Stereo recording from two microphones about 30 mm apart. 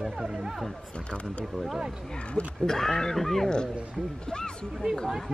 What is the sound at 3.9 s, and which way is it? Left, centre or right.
Speech, left.